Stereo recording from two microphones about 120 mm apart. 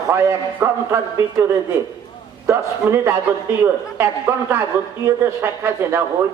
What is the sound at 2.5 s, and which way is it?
A man's voice, 20° right (ahead or behind).